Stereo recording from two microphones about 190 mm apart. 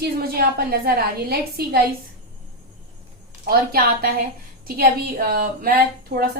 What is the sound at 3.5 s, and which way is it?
A woman's voice, 50° right (ahead or behind).